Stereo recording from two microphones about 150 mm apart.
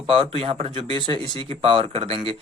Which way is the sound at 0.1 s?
40° right (ahead or behind).